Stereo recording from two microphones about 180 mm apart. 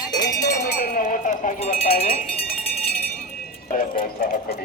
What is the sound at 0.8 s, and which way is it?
Cowbell, 50° left (ahead or behind).